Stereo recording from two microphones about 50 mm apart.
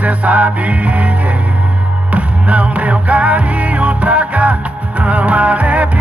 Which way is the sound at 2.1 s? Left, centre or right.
Right.